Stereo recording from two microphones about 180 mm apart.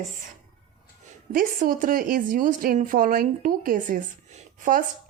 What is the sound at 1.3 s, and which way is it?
A woman's voice, 50° right (ahead or behind).